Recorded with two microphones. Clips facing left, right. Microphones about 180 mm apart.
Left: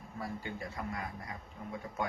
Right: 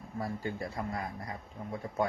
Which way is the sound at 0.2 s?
40° right (ahead or behind).